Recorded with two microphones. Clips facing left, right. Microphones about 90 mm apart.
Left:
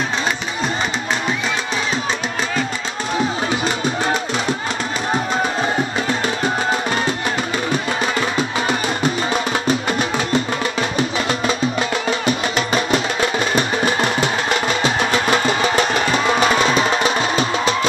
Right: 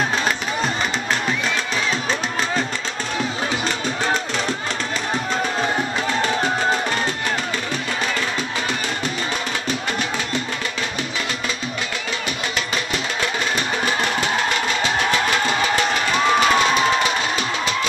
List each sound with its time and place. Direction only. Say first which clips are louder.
8.4 s music: left 5 dB; 15° left (ahead or behind)
10.3 s music: left 6 dB; 40° left (ahead or behind)
14.2 s music: left 2 dB; 20° left (ahead or behind)